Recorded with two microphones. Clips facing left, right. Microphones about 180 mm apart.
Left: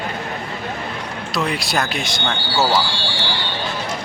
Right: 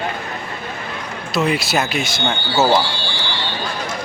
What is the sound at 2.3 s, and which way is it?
Speech, 20° right (ahead or behind).